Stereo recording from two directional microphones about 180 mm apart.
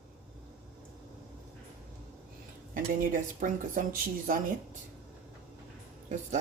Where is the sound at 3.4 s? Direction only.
50° right (ahead or behind).